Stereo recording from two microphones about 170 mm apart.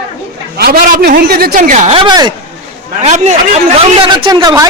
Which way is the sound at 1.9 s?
25° right (ahead or behind).